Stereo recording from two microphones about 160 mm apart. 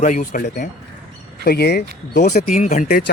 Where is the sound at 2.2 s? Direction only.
55° left (ahead or behind).